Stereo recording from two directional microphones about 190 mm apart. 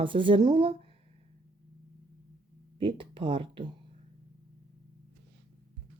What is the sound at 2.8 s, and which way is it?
Speech, 25° right (ahead or behind).